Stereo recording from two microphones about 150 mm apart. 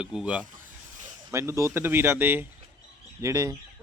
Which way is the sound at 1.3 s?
20° right (ahead or behind).